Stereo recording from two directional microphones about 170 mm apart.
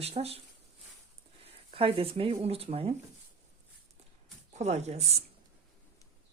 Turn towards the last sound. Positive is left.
turn(degrees=-40)  # may be behind; listen again after turning